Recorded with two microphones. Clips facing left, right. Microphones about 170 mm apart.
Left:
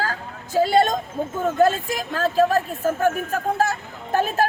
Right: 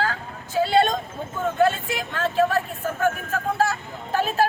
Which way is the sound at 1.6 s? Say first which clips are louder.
Left 2 dB; 40° left (ahead or behind).